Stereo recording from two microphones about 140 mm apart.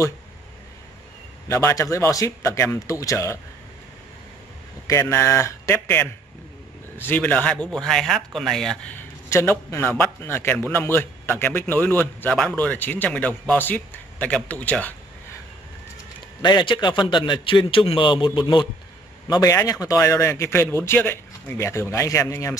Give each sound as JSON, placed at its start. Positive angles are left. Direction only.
{"t": 1.5, "sound": "a man's voice", "side_deg": 20}
{"t": 5.1, "sound": "a man's voice", "side_deg": 20}
{"t": 8.9, "sound": "a man's voice", "side_deg": 15}
{"t": 16.3, "sound": "a man's voice", "side_deg": 30}